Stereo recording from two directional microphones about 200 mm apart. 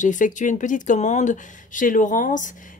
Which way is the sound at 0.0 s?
40° left (ahead or behind).